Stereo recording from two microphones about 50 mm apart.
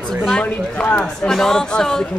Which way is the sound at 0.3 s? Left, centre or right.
Left.